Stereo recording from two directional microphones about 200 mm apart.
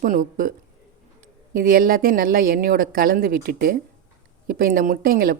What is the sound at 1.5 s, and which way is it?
Speech, 45° right (ahead or behind).